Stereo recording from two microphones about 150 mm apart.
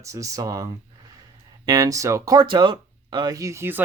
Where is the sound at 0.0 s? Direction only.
20° right (ahead or behind).